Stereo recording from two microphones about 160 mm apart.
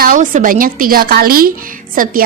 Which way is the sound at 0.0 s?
55° right (ahead or behind).